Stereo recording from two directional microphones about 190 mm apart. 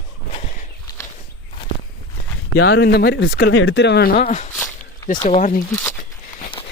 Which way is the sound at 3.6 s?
75° left (ahead or behind).